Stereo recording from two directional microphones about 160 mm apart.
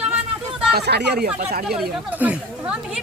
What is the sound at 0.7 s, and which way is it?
Speech, 90° right.